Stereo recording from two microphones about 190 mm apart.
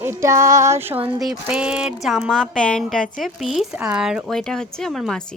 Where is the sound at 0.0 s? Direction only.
15° right (ahead or behind).